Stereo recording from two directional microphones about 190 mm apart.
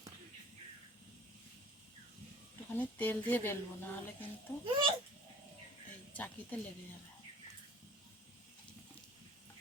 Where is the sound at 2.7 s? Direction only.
10° left (ahead or behind).